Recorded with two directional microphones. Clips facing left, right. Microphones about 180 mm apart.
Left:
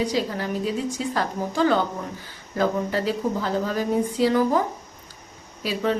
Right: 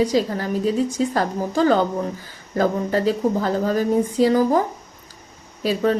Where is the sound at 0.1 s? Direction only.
40° right (ahead or behind).